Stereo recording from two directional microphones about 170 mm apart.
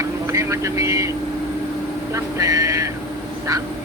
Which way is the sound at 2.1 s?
20° right (ahead or behind).